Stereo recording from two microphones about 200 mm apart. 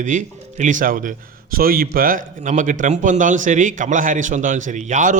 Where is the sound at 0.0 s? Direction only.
40° right (ahead or behind).